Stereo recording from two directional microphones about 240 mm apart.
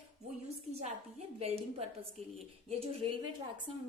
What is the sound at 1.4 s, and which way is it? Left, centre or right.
A woman's voice, right.